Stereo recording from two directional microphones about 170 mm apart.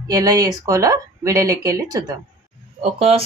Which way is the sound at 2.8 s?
35° right (ahead or behind).